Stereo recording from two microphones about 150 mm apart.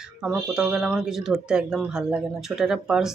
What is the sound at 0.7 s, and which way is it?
Speech, centre (ahead or behind).